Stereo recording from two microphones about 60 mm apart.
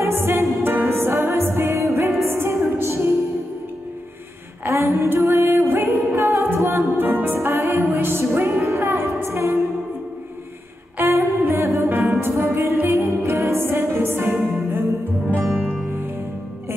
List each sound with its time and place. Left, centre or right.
0.0 s music: right
1.8 s music: right
4.6 s music: right
11.0 s music: right
12.0 s music: right
12.4 s music: right
15.3 s music: right